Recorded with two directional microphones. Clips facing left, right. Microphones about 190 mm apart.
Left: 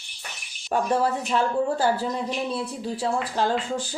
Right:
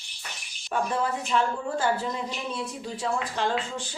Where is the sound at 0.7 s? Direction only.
40° left (ahead or behind).